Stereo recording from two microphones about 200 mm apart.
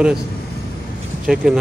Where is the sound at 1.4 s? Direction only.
5° right (ahead or behind).